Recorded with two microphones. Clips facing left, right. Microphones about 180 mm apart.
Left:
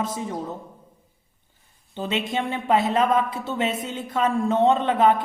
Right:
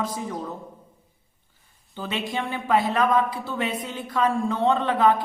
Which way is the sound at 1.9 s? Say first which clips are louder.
Left 3 dB; 20° left (ahead or behind).